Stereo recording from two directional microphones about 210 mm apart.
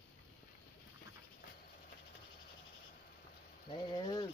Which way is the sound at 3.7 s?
20° left (ahead or behind).